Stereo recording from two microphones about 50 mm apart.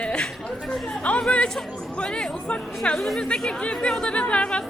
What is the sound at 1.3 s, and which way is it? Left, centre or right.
A woman's voice, left.